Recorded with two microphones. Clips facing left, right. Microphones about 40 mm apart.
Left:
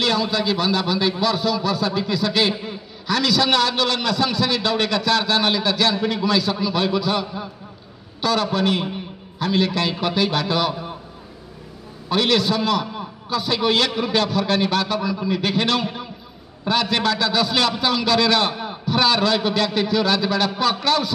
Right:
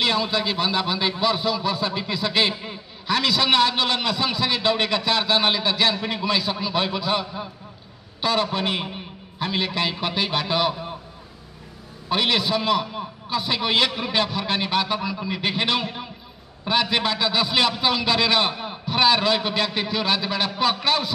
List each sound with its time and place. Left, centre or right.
0.0 s a man's voice: centre
10.7 s a sound: centre
12.1 s a man's voice: centre